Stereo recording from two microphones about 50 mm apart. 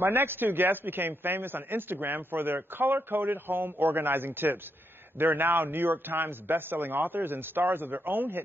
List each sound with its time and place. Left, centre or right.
0.0 s a man's voice: right